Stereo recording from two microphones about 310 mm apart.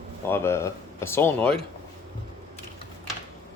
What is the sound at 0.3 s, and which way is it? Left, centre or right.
Speech, centre.